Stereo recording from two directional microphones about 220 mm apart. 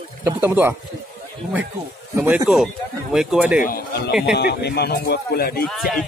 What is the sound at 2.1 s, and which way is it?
Speech, 10° right (ahead or behind).